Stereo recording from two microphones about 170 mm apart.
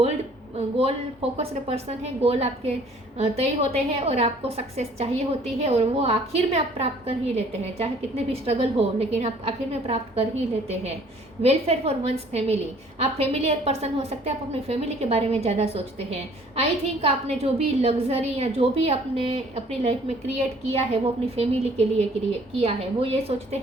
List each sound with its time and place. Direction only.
0.5 s a sound: 35° right (ahead or behind)
1.4 s a woman's voice: 35° right (ahead or behind)
11.4 s a woman's voice: 40° right (ahead or behind)